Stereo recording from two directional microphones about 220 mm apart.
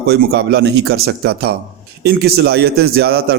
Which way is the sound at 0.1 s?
50° right (ahead or behind).